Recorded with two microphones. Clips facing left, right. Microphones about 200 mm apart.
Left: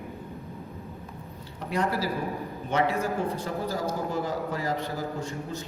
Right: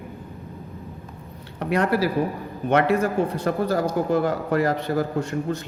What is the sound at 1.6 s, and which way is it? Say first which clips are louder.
A man's voice: right 7 dB; 65° right (ahead or behind).